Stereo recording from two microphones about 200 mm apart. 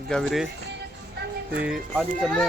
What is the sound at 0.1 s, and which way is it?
Speech, centre (ahead or behind).